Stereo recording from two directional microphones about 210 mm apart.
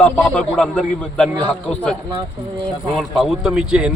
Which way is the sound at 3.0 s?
Centre (ahead or behind).